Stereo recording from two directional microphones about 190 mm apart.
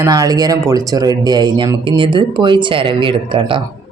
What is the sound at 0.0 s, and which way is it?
A man's voice, 20° right (ahead or behind).